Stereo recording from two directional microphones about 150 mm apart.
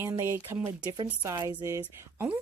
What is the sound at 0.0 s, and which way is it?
Speech, 15° right (ahead or behind).